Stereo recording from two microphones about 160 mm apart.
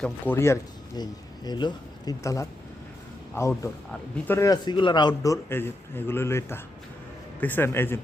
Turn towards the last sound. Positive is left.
turn(degrees=15)  # may be behind; listen again after turning